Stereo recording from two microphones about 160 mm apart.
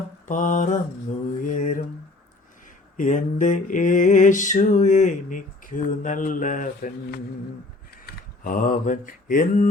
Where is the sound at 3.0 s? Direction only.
55° left (ahead or behind).